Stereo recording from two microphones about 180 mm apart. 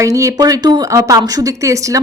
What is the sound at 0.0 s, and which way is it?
Speech, 15° right (ahead or behind).